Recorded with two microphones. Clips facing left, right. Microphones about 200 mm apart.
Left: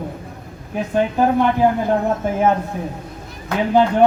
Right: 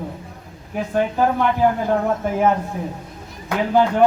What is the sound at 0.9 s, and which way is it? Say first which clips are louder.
Speech: left 2 dB; 15° left (ahead or behind).